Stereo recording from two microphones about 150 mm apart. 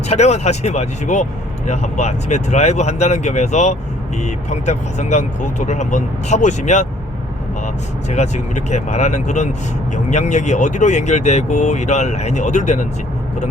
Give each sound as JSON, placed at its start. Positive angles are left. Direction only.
{"t": 0.1, "sound": "speech", "side_deg": 45}
{"t": 8.1, "sound": "speech", "side_deg": 50}